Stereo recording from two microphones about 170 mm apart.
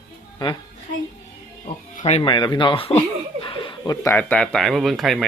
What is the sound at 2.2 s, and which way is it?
Speech, 25° left (ahead or behind).